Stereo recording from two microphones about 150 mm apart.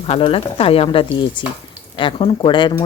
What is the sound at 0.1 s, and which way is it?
Speech, 40° left (ahead or behind).